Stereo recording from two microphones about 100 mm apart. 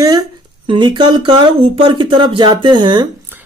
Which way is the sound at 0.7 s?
55° right (ahead or behind).